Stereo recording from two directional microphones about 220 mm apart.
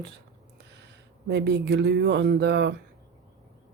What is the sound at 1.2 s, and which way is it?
Speech, 50° right (ahead or behind).